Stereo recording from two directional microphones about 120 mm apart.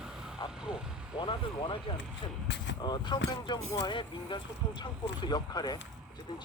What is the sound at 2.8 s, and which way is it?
Speech, 40° left (ahead or behind).